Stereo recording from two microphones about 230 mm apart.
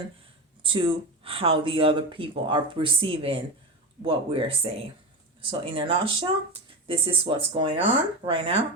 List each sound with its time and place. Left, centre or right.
0.6 s speech: right